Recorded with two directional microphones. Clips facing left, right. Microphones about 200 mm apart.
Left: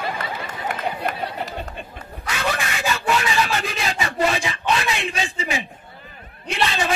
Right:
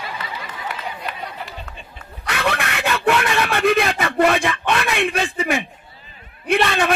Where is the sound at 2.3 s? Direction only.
60° right (ahead or behind).